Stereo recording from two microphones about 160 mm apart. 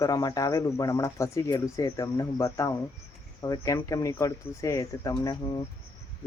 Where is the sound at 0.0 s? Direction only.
25° left (ahead or behind).